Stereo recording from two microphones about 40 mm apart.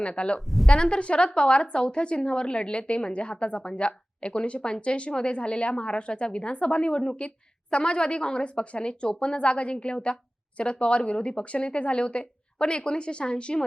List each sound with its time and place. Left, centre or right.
0.0 s a woman's voice: left
0.3 s a woman's voice: centre
0.7 s a woman's voice: left